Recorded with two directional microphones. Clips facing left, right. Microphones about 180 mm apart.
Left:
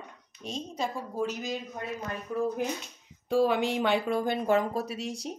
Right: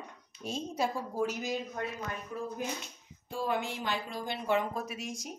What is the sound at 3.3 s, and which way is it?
Speech, 90° left.